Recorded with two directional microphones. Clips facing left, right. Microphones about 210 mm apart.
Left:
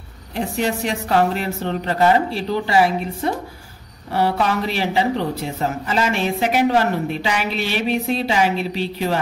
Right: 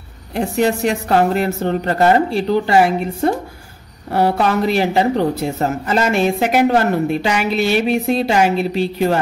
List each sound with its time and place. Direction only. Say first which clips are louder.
0.4 s a woman's voice: right 5 dB; 45° right (ahead or behind)